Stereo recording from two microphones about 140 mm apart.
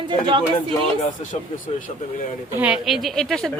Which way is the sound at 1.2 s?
65° left (ahead or behind).